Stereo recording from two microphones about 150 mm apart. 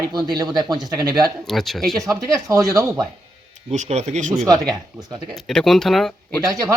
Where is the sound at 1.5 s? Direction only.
Centre (ahead or behind).